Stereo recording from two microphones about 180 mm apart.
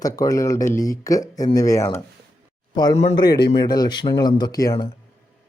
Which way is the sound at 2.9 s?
35° left (ahead or behind).